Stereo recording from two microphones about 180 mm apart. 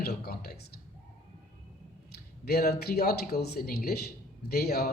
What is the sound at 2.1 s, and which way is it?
Speech, 60° left (ahead or behind).